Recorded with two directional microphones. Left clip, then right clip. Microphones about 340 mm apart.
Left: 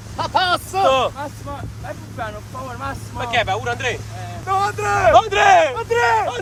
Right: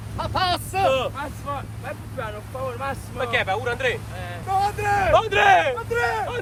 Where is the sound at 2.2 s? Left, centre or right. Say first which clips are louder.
Left 1 dB; centre.